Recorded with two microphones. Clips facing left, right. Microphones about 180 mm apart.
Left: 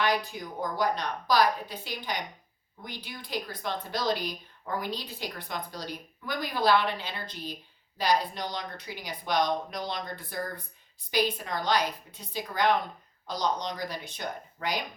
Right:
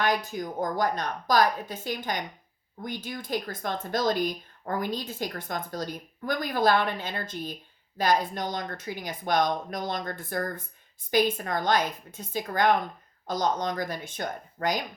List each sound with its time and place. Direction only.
0.0 s speech: 45° right (ahead or behind)